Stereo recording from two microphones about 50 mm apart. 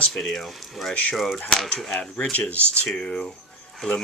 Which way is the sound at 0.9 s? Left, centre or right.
Left.